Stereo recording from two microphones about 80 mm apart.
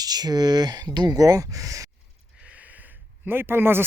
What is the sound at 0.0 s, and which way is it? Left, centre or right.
Speech, right.